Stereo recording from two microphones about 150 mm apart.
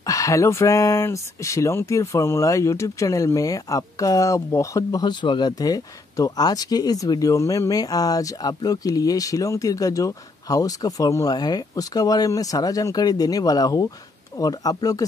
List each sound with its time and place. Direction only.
0.0 s speech: 20° left (ahead or behind)